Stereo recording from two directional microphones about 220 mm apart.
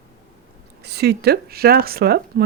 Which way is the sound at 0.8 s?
50° right (ahead or behind).